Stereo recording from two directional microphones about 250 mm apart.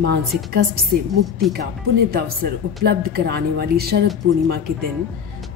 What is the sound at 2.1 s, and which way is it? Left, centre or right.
A woman's voice, right.